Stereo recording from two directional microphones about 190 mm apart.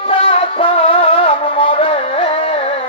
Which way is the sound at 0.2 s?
30° left (ahead or behind).